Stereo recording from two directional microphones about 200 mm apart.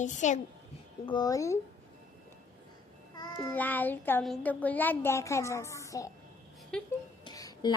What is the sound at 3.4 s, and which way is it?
A child's voice, 10° left (ahead or behind).